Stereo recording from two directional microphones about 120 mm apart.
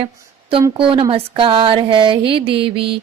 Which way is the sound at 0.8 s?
50° right (ahead or behind).